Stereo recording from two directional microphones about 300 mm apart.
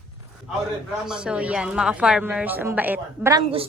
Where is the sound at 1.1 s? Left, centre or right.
Centre.